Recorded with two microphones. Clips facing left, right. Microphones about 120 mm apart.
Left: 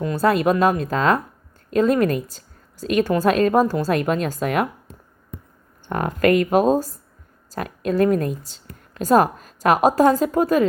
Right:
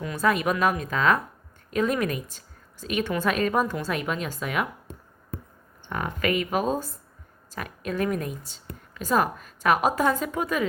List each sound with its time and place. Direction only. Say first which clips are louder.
0.0 s a woman's voice: left 6 dB; 35° left (ahead or behind)
3.9 s speech: left 8 dB; 45° left (ahead or behind)
5.8 s a woman's voice: left 8 dB; 45° left (ahead or behind)